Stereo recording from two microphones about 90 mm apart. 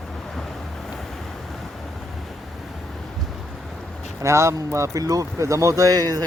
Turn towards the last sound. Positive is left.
turn(degrees=-45)  # may be behind; listen again after turning